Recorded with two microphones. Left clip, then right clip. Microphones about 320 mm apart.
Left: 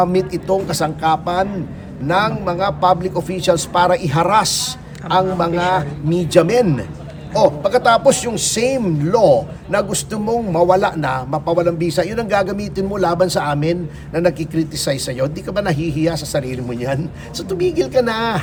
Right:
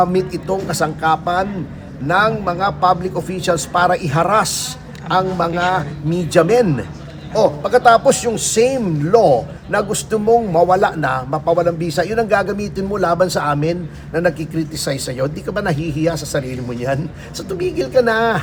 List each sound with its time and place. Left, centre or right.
0.0 s a man's voice: centre